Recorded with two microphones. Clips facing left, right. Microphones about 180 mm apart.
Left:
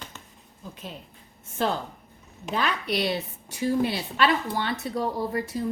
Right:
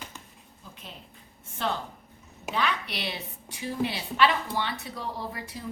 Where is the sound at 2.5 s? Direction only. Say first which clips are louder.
Left 3 dB; 40° left (ahead or behind).